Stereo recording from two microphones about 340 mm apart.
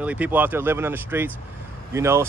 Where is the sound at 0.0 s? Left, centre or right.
Centre.